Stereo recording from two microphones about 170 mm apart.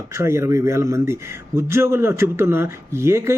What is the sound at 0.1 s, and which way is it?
Speech, 15° right (ahead or behind).